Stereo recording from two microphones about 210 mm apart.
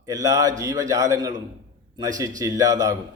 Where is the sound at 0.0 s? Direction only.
15° right (ahead or behind).